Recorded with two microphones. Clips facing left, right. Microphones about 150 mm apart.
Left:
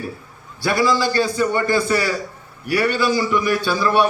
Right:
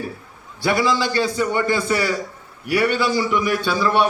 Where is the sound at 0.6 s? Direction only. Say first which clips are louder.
Left 1 dB; 20° right (ahead or behind).